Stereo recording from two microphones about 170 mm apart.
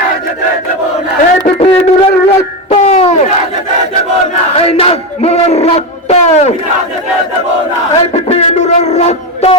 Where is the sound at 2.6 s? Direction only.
40° left (ahead or behind).